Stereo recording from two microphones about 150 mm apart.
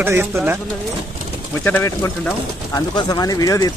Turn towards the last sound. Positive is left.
turn(degrees=25)  # may be behind; listen again after turning